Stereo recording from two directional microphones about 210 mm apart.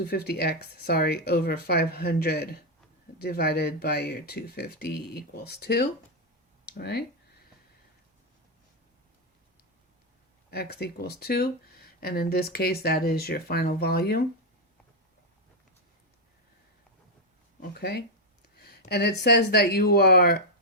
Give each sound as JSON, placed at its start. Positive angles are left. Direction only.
{"t": 0.1, "sound": "speech", "side_deg": 50}
{"t": 10.5, "sound": "speech", "side_deg": 50}
{"t": 17.6, "sound": "speech", "side_deg": 50}
{"t": 18.5, "sound": "a sound", "side_deg": 50}
{"t": 18.9, "sound": "speech", "side_deg": 50}